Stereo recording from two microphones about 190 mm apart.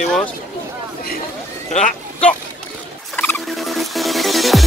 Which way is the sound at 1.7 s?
35° left (ahead or behind).